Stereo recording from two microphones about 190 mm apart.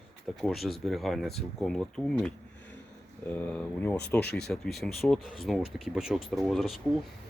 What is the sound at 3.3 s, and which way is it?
Speech, 10° left (ahead or behind).